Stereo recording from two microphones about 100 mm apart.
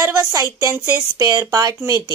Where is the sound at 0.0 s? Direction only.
35° right (ahead or behind).